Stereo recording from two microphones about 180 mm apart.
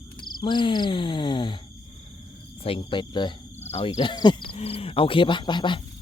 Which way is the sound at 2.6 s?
30° left (ahead or behind).